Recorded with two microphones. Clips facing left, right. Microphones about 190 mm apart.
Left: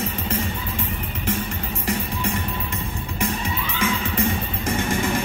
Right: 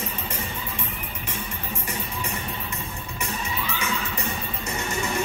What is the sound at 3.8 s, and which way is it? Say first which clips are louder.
Music: left 7 dB; 90° left.